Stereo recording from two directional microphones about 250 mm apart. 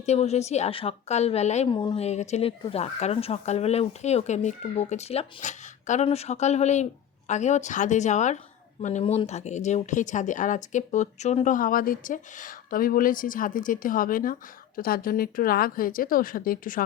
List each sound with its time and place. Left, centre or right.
0.0 s a woman's voice: left